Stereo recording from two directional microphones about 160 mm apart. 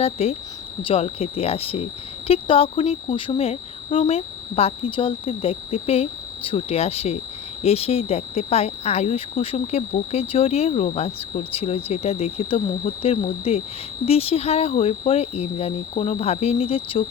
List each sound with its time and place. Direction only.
0.0 s speech: 40° left (ahead or behind)